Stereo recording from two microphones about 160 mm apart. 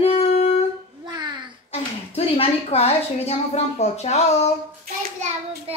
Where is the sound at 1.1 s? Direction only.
25° right (ahead or behind).